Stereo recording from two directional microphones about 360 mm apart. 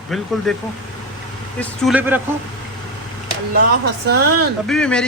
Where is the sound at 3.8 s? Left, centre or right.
Right.